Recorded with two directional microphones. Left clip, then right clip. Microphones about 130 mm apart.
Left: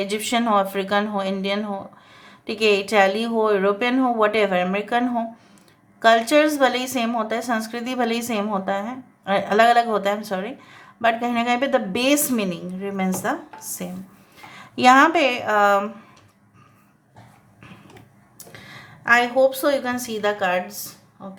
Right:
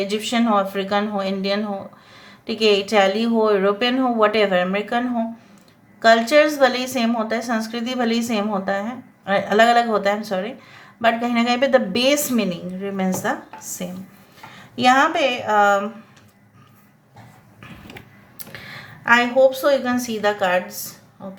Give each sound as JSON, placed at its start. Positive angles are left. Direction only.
{"t": 0.0, "sound": "a woman's voice", "side_deg": 30}
{"t": 14.5, "sound": "speech", "side_deg": 40}
{"t": 18.5, "sound": "a woman's voice", "side_deg": 20}